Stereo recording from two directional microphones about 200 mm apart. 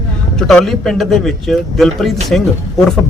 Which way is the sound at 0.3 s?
Centre (ahead or behind).